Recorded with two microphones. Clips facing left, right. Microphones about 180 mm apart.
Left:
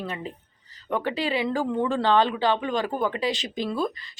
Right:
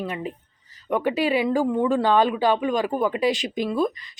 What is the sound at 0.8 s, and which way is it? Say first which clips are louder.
Speech: right 4 dB; 15° right (ahead or behind).